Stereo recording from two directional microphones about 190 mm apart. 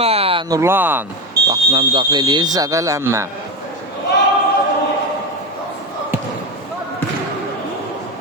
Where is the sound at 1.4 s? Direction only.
25° right (ahead or behind).